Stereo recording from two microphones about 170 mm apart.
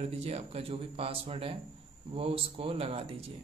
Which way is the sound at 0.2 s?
35° right (ahead or behind).